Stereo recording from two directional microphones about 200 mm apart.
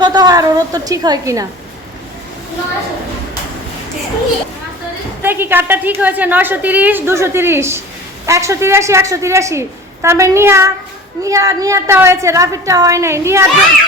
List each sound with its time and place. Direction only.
0.0 s a woman's voice: 20° right (ahead or behind)
5.2 s a woman's voice: 10° right (ahead or behind)